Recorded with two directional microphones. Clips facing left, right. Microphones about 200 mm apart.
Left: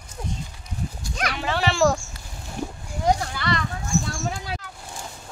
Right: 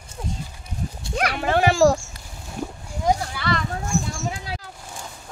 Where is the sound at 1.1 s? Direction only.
55° right (ahead or behind).